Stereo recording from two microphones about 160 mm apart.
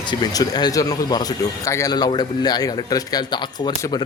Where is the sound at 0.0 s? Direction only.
25° left (ahead or behind).